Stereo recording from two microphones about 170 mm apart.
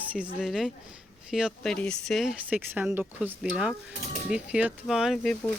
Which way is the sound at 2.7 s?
10° right (ahead or behind).